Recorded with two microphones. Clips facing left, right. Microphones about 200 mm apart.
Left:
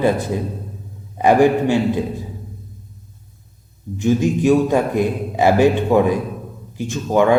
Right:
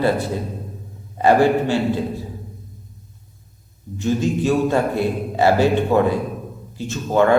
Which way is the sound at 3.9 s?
15° left (ahead or behind).